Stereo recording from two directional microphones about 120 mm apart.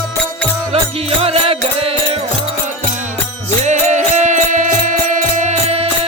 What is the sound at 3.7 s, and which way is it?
Music, 80° right.